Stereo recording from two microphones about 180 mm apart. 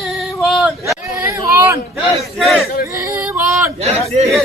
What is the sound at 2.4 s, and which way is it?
Speech, centre (ahead or behind).